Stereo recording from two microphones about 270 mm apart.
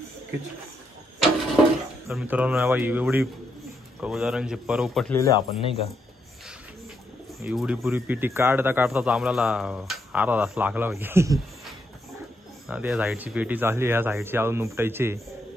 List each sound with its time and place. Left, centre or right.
2.0 s a man's voice: centre
5.5 s speech: left
7.4 s a man's voice: centre